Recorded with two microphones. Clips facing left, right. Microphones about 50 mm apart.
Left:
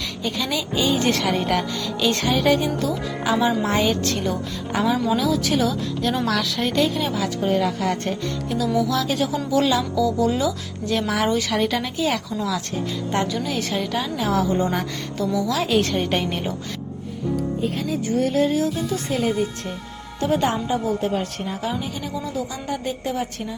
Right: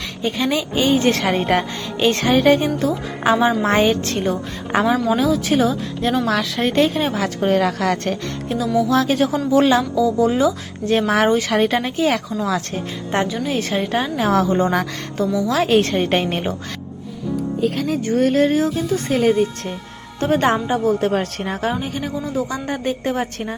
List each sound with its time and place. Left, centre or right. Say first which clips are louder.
0.2 s a woman's voice: right 6 dB; right
8.9 s a woman's voice: right 5 dB; right
15.3 s a woman's voice: right 4 dB; right
17.6 s a woman's voice: right 4 dB; right
21.0 s a woman's voice: right 4 dB; right